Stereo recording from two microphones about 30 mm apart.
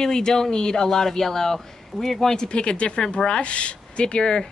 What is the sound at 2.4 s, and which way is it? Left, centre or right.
Speech, left.